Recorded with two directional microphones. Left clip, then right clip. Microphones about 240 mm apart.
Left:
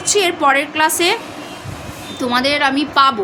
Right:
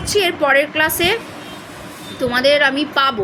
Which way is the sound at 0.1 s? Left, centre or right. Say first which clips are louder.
Left 1 dB; centre.